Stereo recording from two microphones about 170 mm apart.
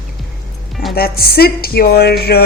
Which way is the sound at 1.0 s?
60° left (ahead or behind).